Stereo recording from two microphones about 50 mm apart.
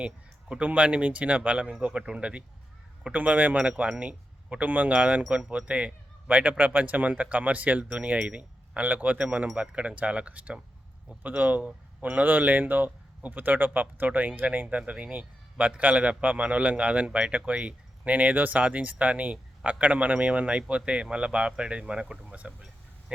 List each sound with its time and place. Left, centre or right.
0.0 s a man's voice: right
8.8 s a man's voice: right